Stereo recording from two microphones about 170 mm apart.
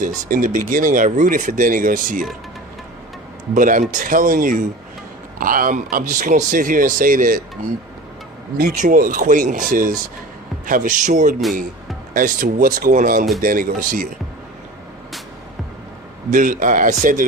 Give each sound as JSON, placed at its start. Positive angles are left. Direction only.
{"t": 0.0, "sound": "speech", "side_deg": -55}
{"t": 3.5, "sound": "speech", "side_deg": -50}
{"t": 8.5, "sound": "speech", "side_deg": -55}
{"t": 16.3, "sound": "speech", "side_deg": -50}